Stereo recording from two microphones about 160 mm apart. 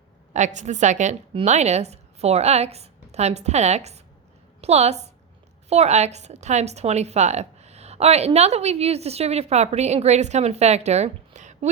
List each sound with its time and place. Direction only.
0.3 s a woman's voice: 45° right (ahead or behind)